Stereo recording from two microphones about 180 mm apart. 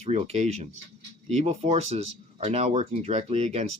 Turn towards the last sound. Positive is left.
turn(degrees=-35)  # may be behind; listen again after turning